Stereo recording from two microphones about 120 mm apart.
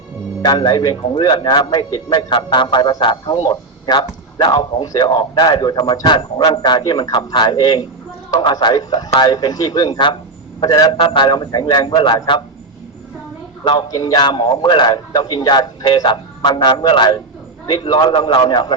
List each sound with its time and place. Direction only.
0.4 s a man's voice: 40° left (ahead or behind)
13.7 s a man's voice: 35° left (ahead or behind)